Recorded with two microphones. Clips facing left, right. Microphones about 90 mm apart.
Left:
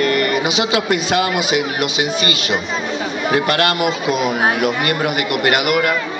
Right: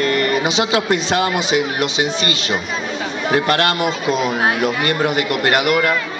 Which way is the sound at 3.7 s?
10° left (ahead or behind).